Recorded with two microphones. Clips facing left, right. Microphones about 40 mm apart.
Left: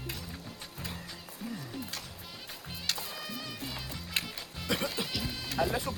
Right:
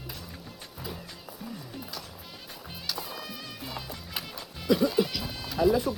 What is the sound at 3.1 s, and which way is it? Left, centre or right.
Music, centre.